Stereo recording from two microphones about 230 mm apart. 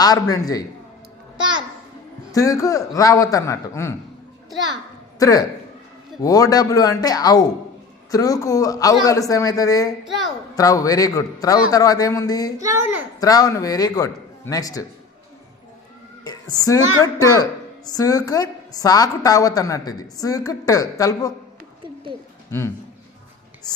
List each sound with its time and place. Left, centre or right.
0.0 s a woman's voice: centre
2.3 s a woman's voice: centre
5.2 s a woman's voice: centre
12.5 s a child's voice: centre
13.1 s a woman's voice: centre
16.2 s a woman's voice: centre